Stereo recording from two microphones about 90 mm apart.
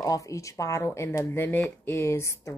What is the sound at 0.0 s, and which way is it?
Speech, 40° left (ahead or behind).